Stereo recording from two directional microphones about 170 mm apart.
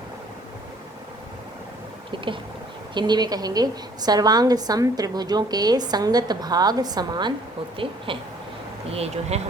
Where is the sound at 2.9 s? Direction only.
25° right (ahead or behind).